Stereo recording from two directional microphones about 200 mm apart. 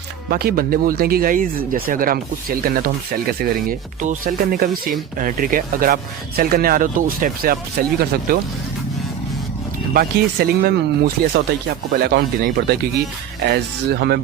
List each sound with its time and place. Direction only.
0.3 s speech: 50° right (ahead or behind)
9.9 s speech: 50° right (ahead or behind)